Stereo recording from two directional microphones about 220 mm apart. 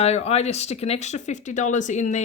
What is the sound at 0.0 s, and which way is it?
Speech, 30° left (ahead or behind).